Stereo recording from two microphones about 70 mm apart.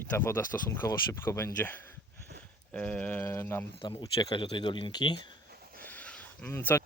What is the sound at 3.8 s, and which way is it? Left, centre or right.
Speech, left.